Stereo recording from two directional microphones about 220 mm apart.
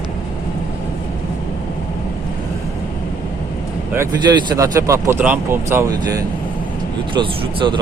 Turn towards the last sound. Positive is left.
turn(degrees=-20)  # may be behind; listen again after turning